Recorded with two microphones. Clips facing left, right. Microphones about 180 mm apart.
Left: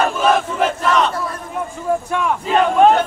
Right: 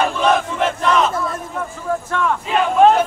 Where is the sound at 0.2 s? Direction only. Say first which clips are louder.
Even; centre (ahead or behind).